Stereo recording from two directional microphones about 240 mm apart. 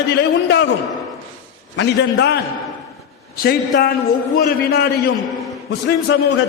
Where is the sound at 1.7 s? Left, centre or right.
Left.